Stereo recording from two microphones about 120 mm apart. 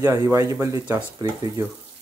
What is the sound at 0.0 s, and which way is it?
Speech, 25° right (ahead or behind).